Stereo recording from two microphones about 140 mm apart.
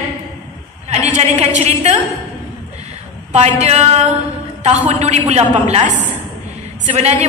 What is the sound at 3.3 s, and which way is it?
A woman's voice, 50° right (ahead or behind).